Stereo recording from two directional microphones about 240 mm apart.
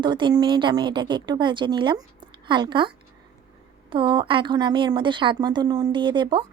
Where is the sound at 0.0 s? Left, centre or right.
Centre.